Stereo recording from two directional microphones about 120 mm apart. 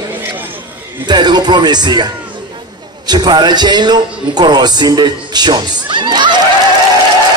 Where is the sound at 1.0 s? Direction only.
35° right (ahead or behind).